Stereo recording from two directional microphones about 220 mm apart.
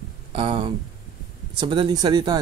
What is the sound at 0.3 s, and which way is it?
Speech, 25° right (ahead or behind).